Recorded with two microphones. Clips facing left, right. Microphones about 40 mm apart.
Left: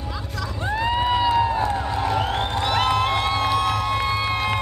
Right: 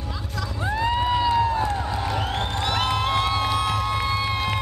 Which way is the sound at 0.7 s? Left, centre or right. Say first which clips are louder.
Left 1 dB; centre.